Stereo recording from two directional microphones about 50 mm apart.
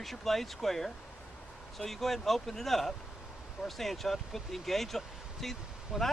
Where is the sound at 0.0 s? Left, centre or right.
Centre.